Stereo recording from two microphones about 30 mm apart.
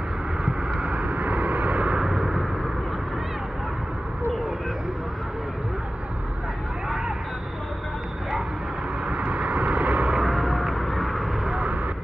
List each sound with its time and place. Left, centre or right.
0.7 s vehicle: right
2.0 s vehicle: right
9.3 s vehicle: right
10.2 s a sound: centre